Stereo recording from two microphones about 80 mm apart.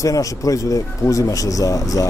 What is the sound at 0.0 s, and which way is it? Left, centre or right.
Speech, left.